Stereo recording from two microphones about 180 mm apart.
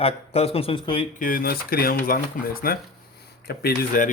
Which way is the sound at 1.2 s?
55° left (ahead or behind).